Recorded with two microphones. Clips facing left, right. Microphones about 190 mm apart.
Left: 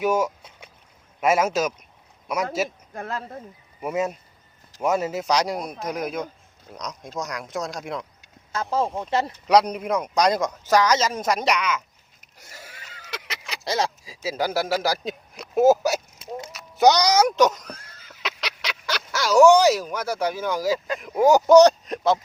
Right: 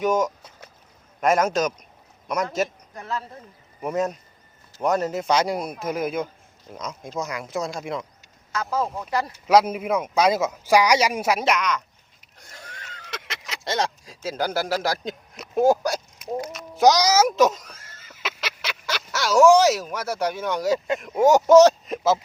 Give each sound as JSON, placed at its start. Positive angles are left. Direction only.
{"t": 0.0, "sound": "a man's voice", "side_deg": 10}
{"t": 2.9, "sound": "speech", "side_deg": 55}
{"t": 3.8, "sound": "speech", "side_deg": 5}
{"t": 8.7, "sound": "speech", "side_deg": 25}
{"t": 9.3, "sound": "a child's voice", "side_deg": -5}
{"t": 17.6, "sound": "a sound", "side_deg": 0}
{"t": 20.7, "sound": "speech", "side_deg": -25}
{"t": 21.0, "sound": "speech", "side_deg": 0}